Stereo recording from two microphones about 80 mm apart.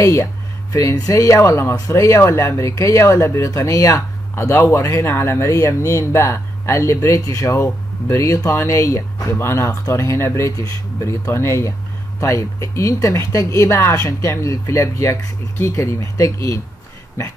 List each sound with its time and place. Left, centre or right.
0.0 s speech: left
9.7 s speech: left